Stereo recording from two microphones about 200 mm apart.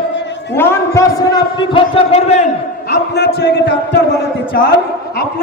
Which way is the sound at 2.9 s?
55° left (ahead or behind).